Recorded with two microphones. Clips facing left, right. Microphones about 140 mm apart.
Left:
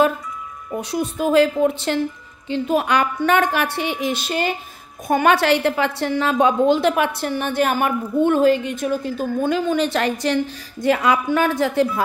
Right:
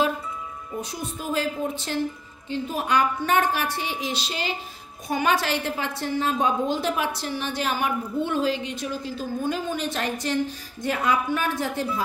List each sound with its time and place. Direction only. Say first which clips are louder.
0.7 s a woman's voice: left 10 dB; 75° left (ahead or behind)